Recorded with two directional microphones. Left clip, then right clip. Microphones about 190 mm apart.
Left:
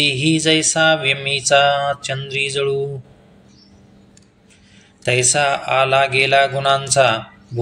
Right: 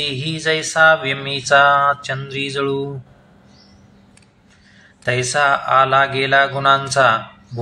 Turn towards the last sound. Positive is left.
turn(degrees=20)  # may be behind; listen again after turning